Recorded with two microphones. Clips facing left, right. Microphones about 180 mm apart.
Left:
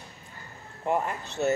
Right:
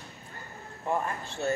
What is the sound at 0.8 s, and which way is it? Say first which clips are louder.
Speech: left 3 dB; 20° left (ahead or behind).